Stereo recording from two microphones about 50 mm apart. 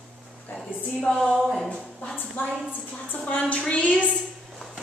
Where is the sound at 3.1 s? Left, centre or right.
Left.